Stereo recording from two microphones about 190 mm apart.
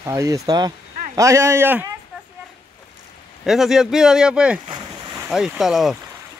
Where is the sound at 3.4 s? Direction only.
Centre (ahead or behind).